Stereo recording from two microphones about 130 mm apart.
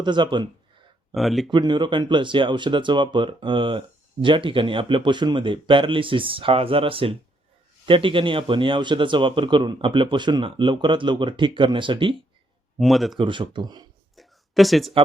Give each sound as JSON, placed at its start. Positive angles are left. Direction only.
{"t": 0.0, "sound": "speech", "side_deg": -35}
{"t": 1.1, "sound": "speech", "side_deg": 0}
{"t": 1.5, "sound": "speech", "side_deg": -35}
{"t": 12.8, "sound": "speech", "side_deg": 0}
{"t": 13.1, "sound": "speech", "side_deg": -40}
{"t": 14.2, "sound": "a sound", "side_deg": 0}